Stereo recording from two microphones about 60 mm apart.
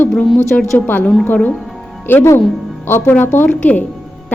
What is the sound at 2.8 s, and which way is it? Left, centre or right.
Speech, left.